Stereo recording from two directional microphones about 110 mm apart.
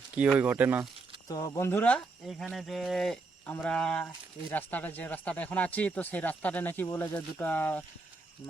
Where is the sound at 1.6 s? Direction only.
20° left (ahead or behind).